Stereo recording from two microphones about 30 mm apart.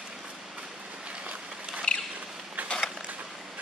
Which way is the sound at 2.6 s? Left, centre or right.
Right.